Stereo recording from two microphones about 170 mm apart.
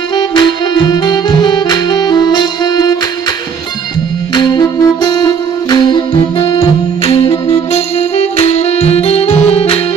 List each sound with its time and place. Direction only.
0.1 s saxophone: 25° left (ahead or behind)
4.4 s saxophone: 25° left (ahead or behind)
6.3 s music: 30° left (ahead or behind)